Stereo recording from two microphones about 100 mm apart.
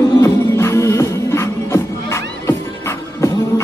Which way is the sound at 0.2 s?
30° left (ahead or behind).